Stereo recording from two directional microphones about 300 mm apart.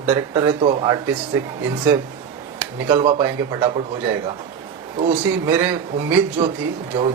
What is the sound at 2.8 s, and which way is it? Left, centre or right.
Speech, centre.